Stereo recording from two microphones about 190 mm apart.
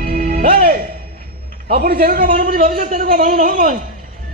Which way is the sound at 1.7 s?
55° right (ahead or behind).